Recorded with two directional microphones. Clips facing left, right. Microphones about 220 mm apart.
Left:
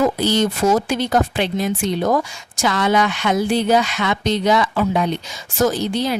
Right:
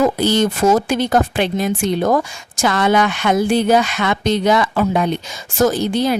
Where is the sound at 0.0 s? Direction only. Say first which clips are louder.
Right 2 dB; 50° right (ahead or behind).